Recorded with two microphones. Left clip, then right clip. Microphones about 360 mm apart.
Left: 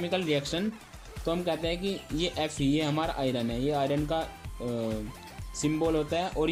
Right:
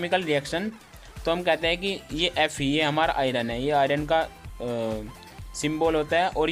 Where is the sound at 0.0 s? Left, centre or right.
Centre.